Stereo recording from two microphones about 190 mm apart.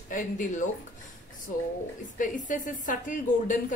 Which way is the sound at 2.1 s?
45° left (ahead or behind).